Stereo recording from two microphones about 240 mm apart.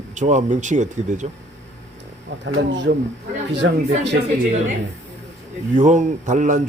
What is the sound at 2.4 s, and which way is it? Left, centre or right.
Speech, right.